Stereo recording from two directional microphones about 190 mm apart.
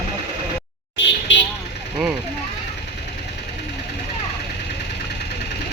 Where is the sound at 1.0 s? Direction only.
70° left (ahead or behind).